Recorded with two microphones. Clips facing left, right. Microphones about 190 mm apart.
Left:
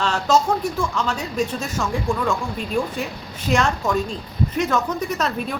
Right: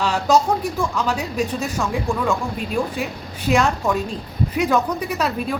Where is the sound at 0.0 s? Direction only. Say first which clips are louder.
Right 2 dB; 10° right (ahead or behind).